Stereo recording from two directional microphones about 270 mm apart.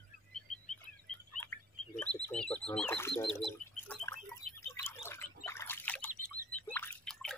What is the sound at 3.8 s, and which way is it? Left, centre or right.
Pig, centre.